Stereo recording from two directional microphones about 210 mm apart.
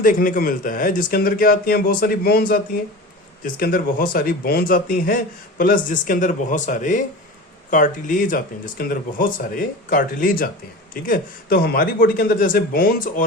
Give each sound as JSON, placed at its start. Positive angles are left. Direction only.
{"t": 0.0, "sound": "speech", "side_deg": 40}